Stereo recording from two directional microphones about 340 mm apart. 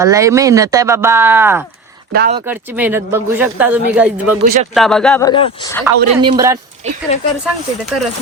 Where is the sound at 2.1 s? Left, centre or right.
Right.